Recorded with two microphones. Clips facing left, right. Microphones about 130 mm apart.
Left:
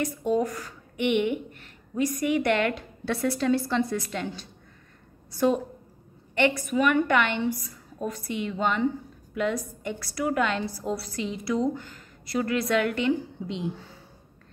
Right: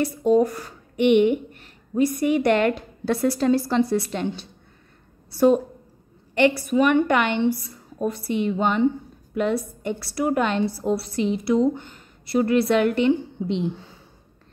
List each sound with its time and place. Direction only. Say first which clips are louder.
0.0 s a woman's voice: right 7 dB; 30° right (ahead or behind)